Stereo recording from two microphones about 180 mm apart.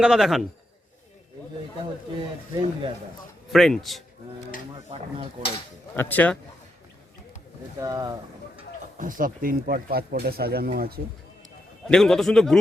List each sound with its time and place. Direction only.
0.0 s a man's voice: centre (ahead or behind)
2.1 s speech: 30° right (ahead or behind)
3.5 s a man's voice: centre (ahead or behind)
6.0 s a man's voice: 10° left (ahead or behind)
7.8 s speech: 20° right (ahead or behind)
9.0 s speech: 50° right (ahead or behind)
11.9 s a man's voice: 5° left (ahead or behind)